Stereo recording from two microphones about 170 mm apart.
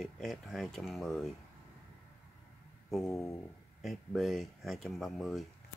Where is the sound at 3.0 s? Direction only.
15° left (ahead or behind).